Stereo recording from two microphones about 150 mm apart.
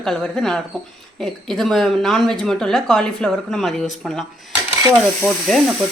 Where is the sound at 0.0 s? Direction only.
5° left (ahead or behind).